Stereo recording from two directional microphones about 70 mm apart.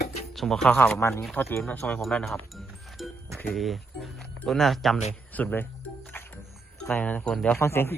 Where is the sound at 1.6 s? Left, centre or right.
Left.